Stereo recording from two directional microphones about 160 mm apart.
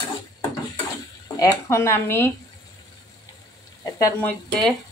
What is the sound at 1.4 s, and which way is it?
Speech, 20° left (ahead or behind).